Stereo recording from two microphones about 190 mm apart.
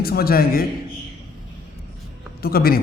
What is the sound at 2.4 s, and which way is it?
Speech, 50° left (ahead or behind).